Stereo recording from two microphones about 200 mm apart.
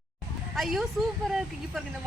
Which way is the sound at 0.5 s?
Centre (ahead or behind).